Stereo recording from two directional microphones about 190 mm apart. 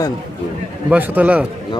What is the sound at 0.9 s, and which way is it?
Speech, 10° right (ahead or behind).